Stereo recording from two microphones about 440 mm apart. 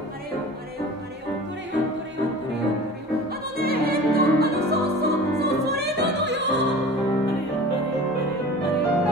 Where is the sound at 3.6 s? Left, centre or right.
Right.